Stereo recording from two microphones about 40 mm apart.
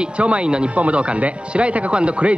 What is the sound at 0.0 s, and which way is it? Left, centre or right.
Speech, right.